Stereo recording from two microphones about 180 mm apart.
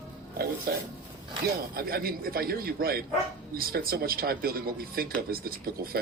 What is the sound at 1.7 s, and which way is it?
Speech, 55° right (ahead or behind).